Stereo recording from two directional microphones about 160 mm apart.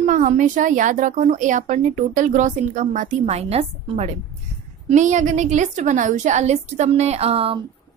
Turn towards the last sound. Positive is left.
turn(degrees=-35)  # may be behind; listen again after turning